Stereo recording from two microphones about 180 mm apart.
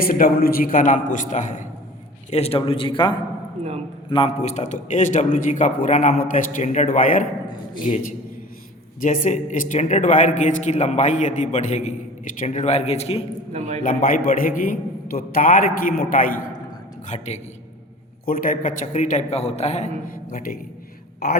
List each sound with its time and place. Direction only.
0.0 s a man's voice: 55° left (ahead or behind)
2.3 s a man's voice: 35° left (ahead or behind)
9.0 s a man's voice: 45° left (ahead or behind)
13.5 s a man's voice: 35° right (ahead or behind)
13.8 s a man's voice: 50° left (ahead or behind)
17.1 s a man's voice: 40° left (ahead or behind)
18.3 s a man's voice: 50° left (ahead or behind)
20.3 s a man's voice: 55° left (ahead or behind)